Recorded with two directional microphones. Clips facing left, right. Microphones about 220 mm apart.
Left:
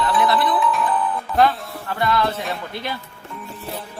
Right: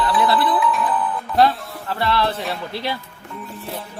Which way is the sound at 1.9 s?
30° right (ahead or behind).